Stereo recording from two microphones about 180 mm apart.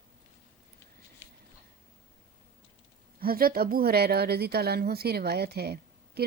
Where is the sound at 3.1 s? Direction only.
55° right (ahead or behind).